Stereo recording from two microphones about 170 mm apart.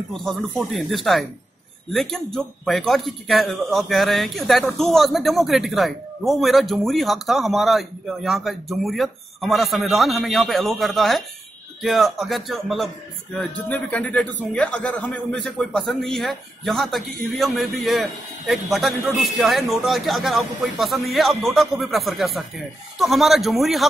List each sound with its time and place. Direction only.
0.1 s a man's voice: centre (ahead or behind)